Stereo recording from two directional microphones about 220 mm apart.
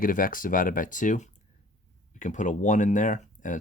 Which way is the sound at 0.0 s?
40° left (ahead or behind).